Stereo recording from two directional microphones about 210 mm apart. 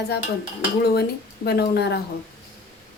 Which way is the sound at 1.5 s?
50° left (ahead or behind).